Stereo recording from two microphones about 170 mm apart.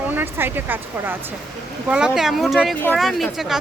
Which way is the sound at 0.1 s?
10° right (ahead or behind).